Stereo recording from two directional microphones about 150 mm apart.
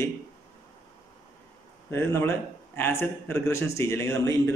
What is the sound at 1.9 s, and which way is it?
A man's voice, 15° left (ahead or behind).